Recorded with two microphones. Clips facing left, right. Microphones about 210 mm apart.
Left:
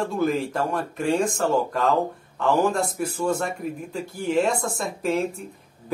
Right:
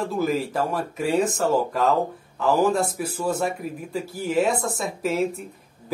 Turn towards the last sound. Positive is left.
turn(degrees=0)  # may be behind; listen again after turning